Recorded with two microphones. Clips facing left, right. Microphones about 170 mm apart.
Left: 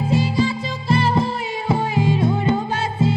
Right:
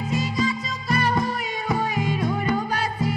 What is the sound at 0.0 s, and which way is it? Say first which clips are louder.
Music: left 5 dB; 30° left (ahead or behind).